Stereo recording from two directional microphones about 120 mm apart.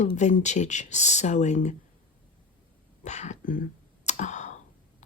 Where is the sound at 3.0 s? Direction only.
75° left (ahead or behind).